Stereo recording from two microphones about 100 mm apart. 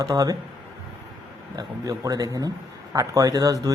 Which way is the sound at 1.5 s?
40° right (ahead or behind).